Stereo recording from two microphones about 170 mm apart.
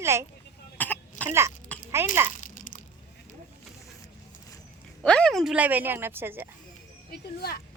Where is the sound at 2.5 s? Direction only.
50° left (ahead or behind).